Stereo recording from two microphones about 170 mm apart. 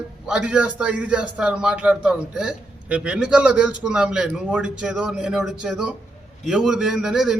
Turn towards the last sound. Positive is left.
turn(degrees=-5)  # may be behind; listen again after turning